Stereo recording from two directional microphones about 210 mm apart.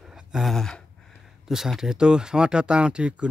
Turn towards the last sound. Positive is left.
turn(degrees=-5)  # may be behind; listen again after turning